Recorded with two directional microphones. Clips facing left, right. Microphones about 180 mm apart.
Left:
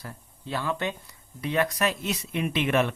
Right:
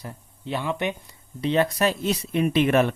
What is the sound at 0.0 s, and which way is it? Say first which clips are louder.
Speech: right 4 dB; 20° right (ahead or behind).